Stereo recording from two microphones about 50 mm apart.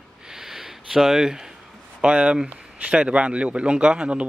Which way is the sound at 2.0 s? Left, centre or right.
Right.